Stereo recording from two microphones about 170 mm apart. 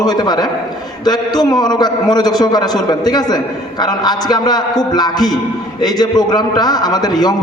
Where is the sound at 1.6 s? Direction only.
25° left (ahead or behind).